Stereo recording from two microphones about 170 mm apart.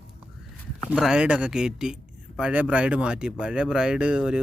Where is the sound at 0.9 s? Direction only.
5° right (ahead or behind).